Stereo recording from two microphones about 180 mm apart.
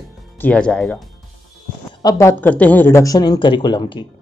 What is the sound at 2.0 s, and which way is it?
Speech, 15° left (ahead or behind).